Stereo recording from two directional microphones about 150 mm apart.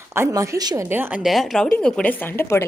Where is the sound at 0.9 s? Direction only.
15° right (ahead or behind).